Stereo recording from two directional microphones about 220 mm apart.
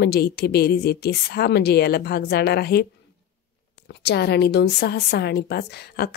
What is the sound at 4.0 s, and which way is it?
A woman's voice, 50° left (ahead or behind).